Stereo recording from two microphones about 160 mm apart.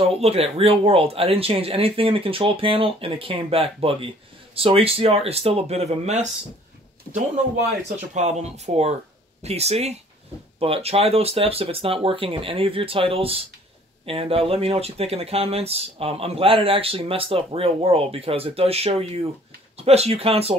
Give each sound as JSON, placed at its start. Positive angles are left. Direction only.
{"t": 0.1, "sound": "speech", "side_deg": -40}
{"t": 8.1, "sound": "speech", "side_deg": -45}